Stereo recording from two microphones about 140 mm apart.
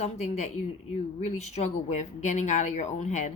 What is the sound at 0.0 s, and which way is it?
Speech, 55° left (ahead or behind).